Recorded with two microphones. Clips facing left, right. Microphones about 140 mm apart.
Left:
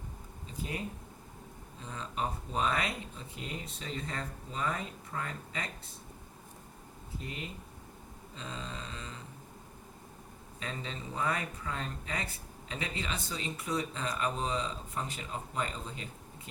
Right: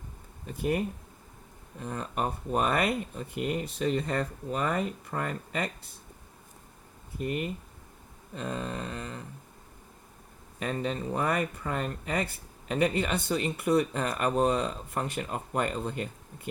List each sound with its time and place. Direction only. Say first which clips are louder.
0.4 s speech: right 10 dB; 60° right (ahead or behind)
7.2 s speech: right 11 dB; 60° right (ahead or behind)
10.6 s speech: right 10 dB; 60° right (ahead or behind)